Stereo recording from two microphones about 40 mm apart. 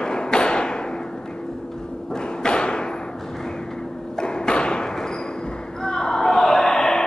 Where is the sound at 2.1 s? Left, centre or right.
Left.